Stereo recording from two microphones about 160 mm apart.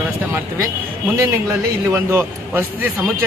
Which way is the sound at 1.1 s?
20° right (ahead or behind).